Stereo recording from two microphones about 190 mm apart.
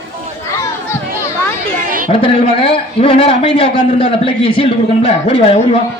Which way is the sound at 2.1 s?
30° left (ahead or behind).